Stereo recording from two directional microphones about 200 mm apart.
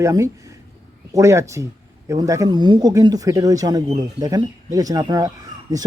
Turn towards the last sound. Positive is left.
turn(degrees=-20)  # may be behind; listen again after turning